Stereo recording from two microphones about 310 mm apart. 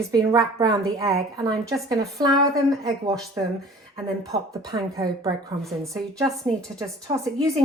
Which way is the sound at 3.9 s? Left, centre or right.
Centre.